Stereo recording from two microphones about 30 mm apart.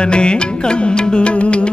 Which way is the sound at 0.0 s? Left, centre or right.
Left.